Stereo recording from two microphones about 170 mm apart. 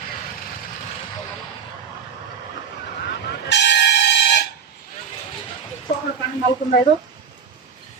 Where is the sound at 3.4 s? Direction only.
85° left.